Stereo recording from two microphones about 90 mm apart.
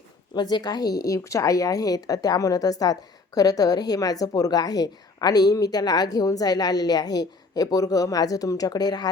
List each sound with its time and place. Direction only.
0.3 s speech: 55° left (ahead or behind)